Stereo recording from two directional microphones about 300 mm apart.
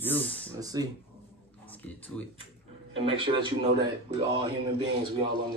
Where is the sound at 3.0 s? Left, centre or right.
Centre.